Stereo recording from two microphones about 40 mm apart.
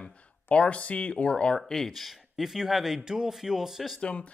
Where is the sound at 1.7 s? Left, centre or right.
Centre.